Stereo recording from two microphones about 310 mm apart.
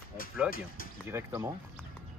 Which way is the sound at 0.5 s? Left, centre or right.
Left.